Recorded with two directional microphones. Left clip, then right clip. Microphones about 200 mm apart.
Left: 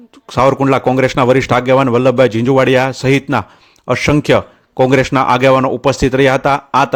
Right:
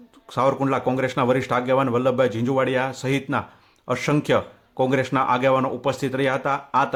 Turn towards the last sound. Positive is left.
turn(degrees=45)  # may be behind; listen again after turning